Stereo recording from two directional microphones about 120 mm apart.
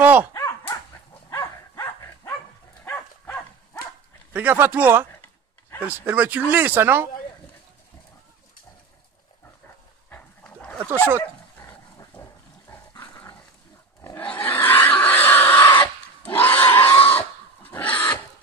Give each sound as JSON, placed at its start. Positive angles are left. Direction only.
{"t": 0.0, "sound": "dog", "side_deg": -15}
{"t": 0.3, "sound": "dog", "side_deg": 20}
{"t": 2.8, "sound": "dog", "side_deg": 15}
{"t": 4.3, "sound": "speech", "side_deg": -15}
{"t": 10.0, "sound": "dog", "side_deg": 15}
{"t": 11.1, "sound": "dog", "side_deg": 20}
{"t": 14.1, "sound": "a sound", "side_deg": 15}
{"t": 16.3, "sound": "pig", "side_deg": 15}